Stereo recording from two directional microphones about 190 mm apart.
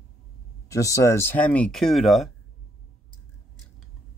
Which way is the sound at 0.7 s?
15° left (ahead or behind).